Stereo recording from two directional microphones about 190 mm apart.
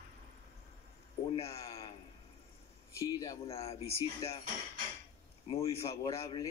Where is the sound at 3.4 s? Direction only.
30° left (ahead or behind).